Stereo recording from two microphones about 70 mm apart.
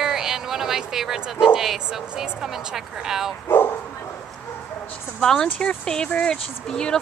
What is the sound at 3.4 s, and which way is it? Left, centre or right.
Bow-wow, left.